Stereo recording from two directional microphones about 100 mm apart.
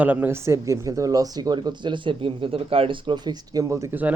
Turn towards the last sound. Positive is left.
turn(degrees=-15)  # may be behind; listen again after turning